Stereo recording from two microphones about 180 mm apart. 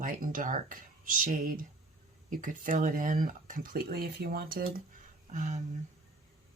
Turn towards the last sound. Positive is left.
turn(degrees=-45)  # may be behind; listen again after turning